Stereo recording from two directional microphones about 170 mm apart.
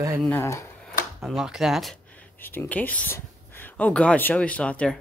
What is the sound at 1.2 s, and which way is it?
Speech, centre (ahead or behind).